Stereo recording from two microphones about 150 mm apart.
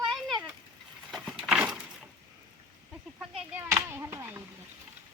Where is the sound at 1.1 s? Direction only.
5° right (ahead or behind).